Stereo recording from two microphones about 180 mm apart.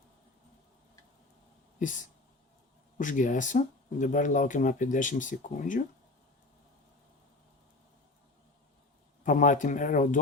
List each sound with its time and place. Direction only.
1.8 s speech: 45° left (ahead or behind)
9.2 s speech: 45° left (ahead or behind)